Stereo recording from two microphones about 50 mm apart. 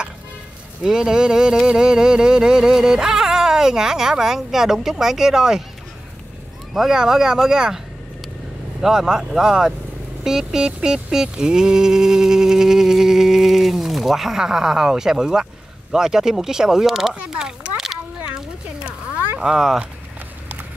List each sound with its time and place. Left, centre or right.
0.8 s music: centre
6.7 s music: centre
8.8 s music: centre
18.8 s a sound: right
19.4 s music: centre